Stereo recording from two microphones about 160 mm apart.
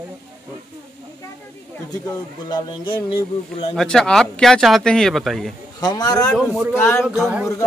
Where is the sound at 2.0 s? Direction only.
25° left (ahead or behind).